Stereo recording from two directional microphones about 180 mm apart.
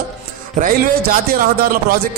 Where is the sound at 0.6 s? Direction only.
55° right (ahead or behind).